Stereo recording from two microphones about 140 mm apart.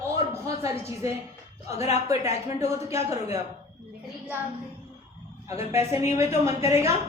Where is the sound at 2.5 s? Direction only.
20° right (ahead or behind).